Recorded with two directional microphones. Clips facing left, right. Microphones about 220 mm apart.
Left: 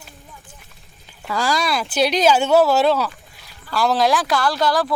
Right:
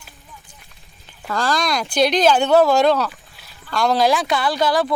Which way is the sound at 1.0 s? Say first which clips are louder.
Even; 5° left (ahead or behind).